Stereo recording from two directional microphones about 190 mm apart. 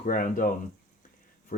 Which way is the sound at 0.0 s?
45° left (ahead or behind).